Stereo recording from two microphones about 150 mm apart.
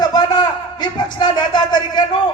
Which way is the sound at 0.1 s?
25° left (ahead or behind).